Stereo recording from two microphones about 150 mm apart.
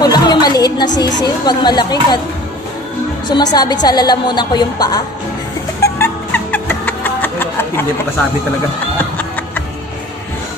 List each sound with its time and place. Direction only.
0.0 s music: 30° left (ahead or behind)
0.9 s a woman's voice: 30° left (ahead or behind)
3.3 s a woman's voice: 30° left (ahead or behind)
5.8 s a sound: 15° left (ahead or behind)